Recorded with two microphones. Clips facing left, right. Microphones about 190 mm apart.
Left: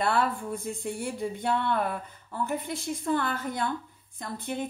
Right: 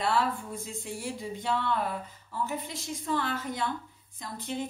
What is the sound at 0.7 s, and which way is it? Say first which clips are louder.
A woman's voice: left 4 dB; 55° left (ahead or behind).